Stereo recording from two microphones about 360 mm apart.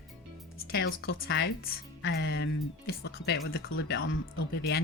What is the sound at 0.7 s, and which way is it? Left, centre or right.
Speech, left.